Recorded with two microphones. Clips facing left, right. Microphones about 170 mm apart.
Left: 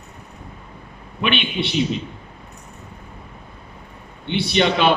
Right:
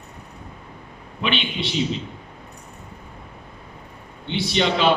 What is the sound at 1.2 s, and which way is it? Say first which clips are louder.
Speech: left 3 dB; 60° left (ahead or behind).